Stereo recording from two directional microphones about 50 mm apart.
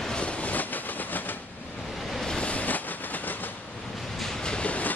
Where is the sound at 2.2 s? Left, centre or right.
Left.